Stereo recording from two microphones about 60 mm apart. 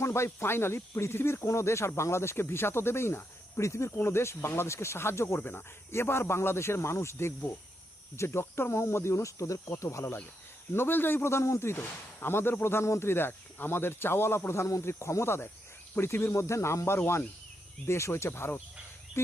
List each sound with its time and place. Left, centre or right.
0.0 s speech: left
1.5 s speech: left
3.6 s speech: left
5.4 s speech: left
10.7 s speech: left
11.8 s speech: left